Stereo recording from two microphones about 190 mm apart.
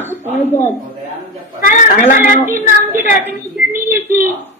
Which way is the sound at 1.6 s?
45° left (ahead or behind).